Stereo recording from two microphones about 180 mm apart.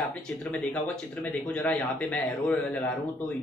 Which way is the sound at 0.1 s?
5° left (ahead or behind).